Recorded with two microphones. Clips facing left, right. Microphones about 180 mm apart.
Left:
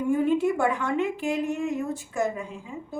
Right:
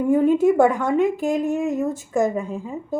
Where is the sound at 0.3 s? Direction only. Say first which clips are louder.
Right 7 dB; 45° right (ahead or behind).